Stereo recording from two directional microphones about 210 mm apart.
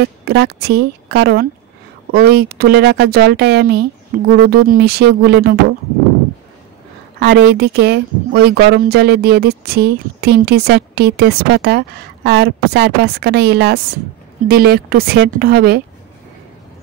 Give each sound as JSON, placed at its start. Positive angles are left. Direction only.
{"t": 0.0, "sound": "speech", "side_deg": -55}
{"t": 7.2, "sound": "speech", "side_deg": -55}